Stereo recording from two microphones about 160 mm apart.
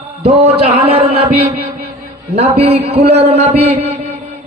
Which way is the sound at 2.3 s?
40° right (ahead or behind).